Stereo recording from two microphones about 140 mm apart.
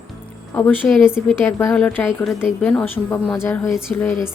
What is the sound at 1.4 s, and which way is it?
A woman's voice, 15° left (ahead or behind).